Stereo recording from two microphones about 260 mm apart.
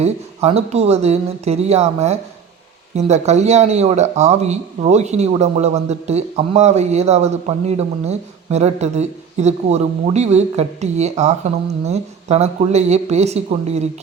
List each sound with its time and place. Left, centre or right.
0.0 s speech: right